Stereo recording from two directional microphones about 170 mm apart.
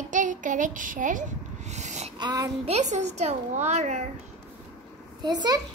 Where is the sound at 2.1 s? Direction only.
25° right (ahead or behind).